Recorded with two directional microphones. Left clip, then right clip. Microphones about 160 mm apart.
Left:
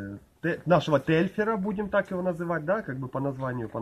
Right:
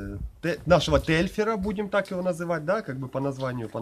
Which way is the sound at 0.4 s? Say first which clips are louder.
Right 2 dB; 10° right (ahead or behind).